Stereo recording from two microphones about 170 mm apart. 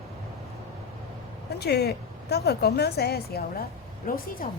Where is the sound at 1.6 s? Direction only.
70° left (ahead or behind).